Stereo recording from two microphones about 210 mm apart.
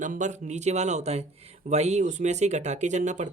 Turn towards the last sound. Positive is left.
turn(degrees=-35)  # may be behind; listen again after turning